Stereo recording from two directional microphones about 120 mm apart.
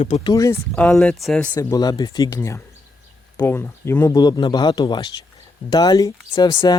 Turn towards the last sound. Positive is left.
turn(degrees=40)  # may be behind; listen again after turning